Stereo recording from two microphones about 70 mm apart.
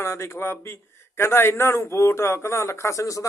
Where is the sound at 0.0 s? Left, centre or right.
Left.